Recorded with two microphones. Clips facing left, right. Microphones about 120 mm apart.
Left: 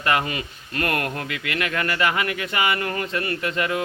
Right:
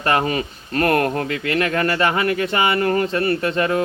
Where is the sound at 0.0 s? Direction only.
35° right (ahead or behind).